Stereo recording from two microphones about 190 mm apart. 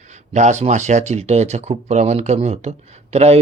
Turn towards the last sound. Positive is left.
turn(degrees=-35)  # may be behind; listen again after turning